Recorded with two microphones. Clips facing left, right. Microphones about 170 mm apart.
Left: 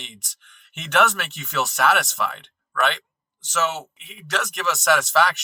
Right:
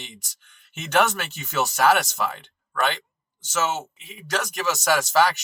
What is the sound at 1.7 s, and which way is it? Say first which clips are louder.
Speech: right 2 dB; 35° right (ahead or behind).